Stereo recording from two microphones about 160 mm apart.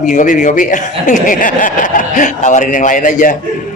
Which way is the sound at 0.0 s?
55° left (ahead or behind).